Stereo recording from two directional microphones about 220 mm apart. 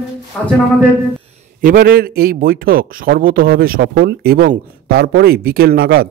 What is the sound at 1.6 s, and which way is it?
A man's voice, 40° right (ahead or behind).